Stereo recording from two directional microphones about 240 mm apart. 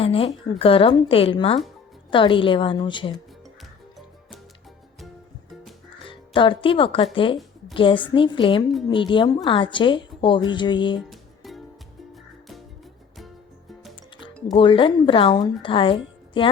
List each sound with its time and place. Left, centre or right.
0.0 s a woman's voice: left
6.1 s a woman's voice: left
11.1 s music: centre
13.1 s music: centre
14.5 s a woman's voice: left